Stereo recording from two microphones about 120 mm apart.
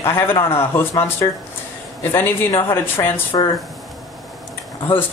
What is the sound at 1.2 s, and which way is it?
Speech, 30° left (ahead or behind).